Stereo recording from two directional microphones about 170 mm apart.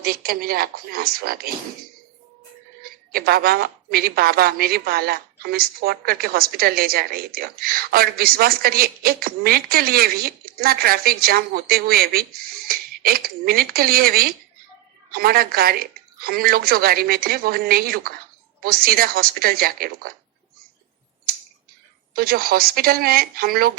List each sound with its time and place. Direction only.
0.0 s speech: 60° right (ahead or behind)
3.1 s speech: 65° right (ahead or behind)
22.1 s speech: 60° right (ahead or behind)